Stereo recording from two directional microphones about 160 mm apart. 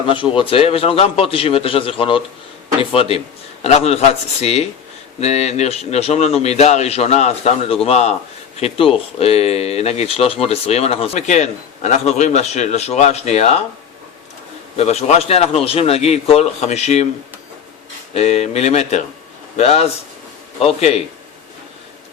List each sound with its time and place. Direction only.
0.1 s speech: 30° left (ahead or behind)
14.8 s speech: 40° left (ahead or behind)
18.1 s speech: 40° left (ahead or behind)